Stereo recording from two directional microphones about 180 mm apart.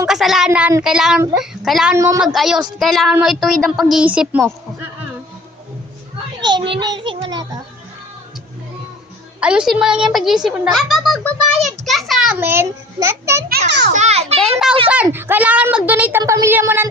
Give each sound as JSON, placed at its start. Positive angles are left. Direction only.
{"t": 0.1, "sound": "a woman's voice", "side_deg": 0}
{"t": 2.0, "sound": "a child's voice", "side_deg": -20}
{"t": 2.2, "sound": "a woman's voice", "side_deg": 0}
{"t": 6.7, "sound": "a child's voice", "side_deg": -25}
{"t": 9.4, "sound": "a woman's voice", "side_deg": -5}
{"t": 13.7, "sound": "a child's voice", "side_deg": -75}
{"t": 13.9, "sound": "a child's voice", "side_deg": -40}
{"t": 14.3, "sound": "a woman's voice", "side_deg": 0}